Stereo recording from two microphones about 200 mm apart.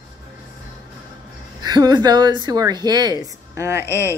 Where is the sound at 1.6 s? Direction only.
20° right (ahead or behind).